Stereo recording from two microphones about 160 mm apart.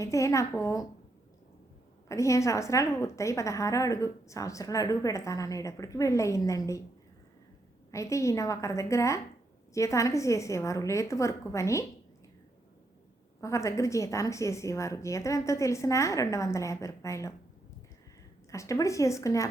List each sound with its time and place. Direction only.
0.0 s a woman's voice: 20° left (ahead or behind)
2.0 s a woman's voice: 20° left (ahead or behind)
7.9 s a woman's voice: 20° left (ahead or behind)
13.4 s a woman's voice: 20° left (ahead or behind)
18.5 s a woman's voice: 20° left (ahead or behind)